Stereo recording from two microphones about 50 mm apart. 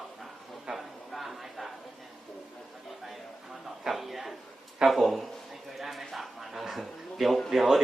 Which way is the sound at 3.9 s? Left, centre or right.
Centre.